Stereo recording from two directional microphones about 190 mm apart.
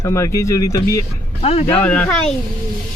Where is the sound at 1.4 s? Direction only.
30° left (ahead or behind).